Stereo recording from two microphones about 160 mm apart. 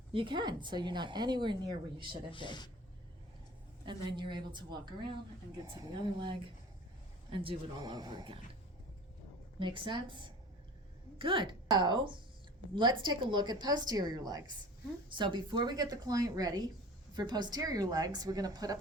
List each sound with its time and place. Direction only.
0.1 s speech: 30° right (ahead or behind)
2.3 s speech: 30° left (ahead or behind)
3.8 s speech: 30° right (ahead or behind)
9.6 s a woman's voice: 30° right (ahead or behind)